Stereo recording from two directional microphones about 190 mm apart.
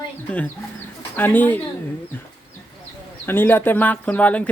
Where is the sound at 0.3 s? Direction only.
5° left (ahead or behind).